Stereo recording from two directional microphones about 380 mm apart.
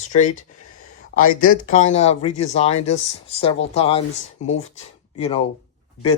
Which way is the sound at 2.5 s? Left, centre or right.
Centre.